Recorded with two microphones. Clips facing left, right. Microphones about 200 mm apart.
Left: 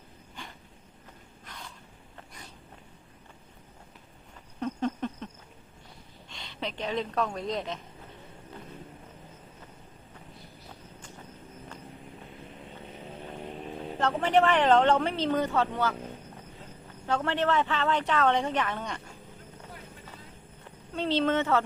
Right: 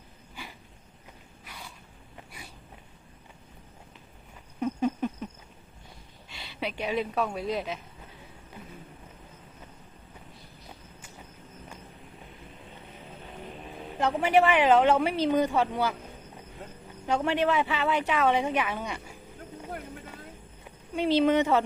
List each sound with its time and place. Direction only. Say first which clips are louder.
0.4 s a sound: right 1 dB; 10° right (ahead or behind)
4.6 s a sound: right 3 dB; 10° right (ahead or behind)
6.2 s speech: right 2 dB; 5° right (ahead or behind)
14.0 s speech: right 1 dB; 10° right (ahead or behind)
17.1 s speech: right 2 dB; 15° right (ahead or behind)
20.7 s speech: right 4 dB; 10° right (ahead or behind)